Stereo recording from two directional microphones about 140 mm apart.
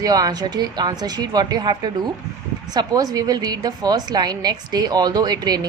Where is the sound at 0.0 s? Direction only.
25° right (ahead or behind).